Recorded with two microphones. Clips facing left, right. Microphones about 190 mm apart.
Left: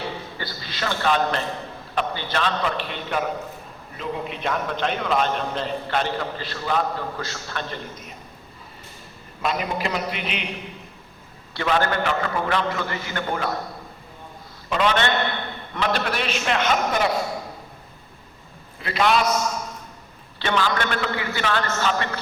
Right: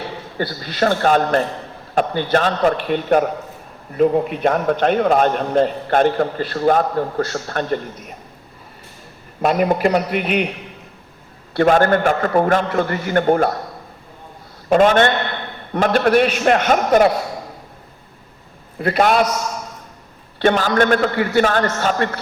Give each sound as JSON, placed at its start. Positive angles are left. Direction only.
{"t": 0.3, "sound": "a man's voice", "side_deg": -55}
{"t": 9.4, "sound": "a man's voice", "side_deg": -50}
{"t": 11.5, "sound": "a man's voice", "side_deg": -50}
{"t": 14.7, "sound": "a man's voice", "side_deg": -50}
{"t": 18.8, "sound": "a man's voice", "side_deg": -50}
{"t": 20.4, "sound": "a man's voice", "side_deg": -45}